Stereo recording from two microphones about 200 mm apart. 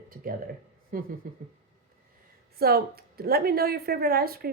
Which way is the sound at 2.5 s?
50° right (ahead or behind).